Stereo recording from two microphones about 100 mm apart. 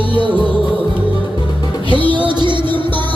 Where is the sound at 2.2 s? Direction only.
55° right (ahead or behind).